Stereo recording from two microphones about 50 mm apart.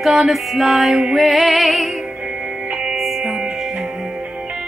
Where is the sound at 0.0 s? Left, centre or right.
Centre.